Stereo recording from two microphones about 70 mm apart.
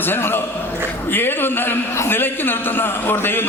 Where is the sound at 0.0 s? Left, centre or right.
Left.